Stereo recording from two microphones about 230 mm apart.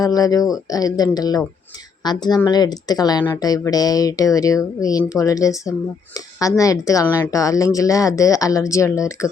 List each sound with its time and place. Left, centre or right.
0.0 s speech: centre